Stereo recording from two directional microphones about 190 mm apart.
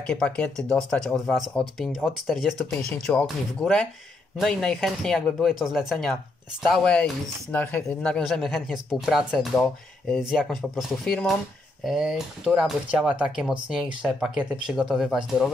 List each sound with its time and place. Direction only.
0.0 s speech: 5° left (ahead or behind)